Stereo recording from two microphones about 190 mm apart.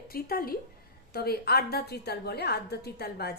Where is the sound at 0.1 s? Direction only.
50° left (ahead or behind).